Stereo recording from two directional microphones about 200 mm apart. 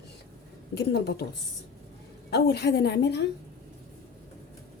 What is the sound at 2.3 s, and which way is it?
Speech, 55° left (ahead or behind).